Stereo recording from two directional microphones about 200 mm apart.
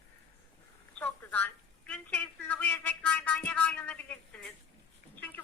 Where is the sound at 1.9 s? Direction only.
5° left (ahead or behind).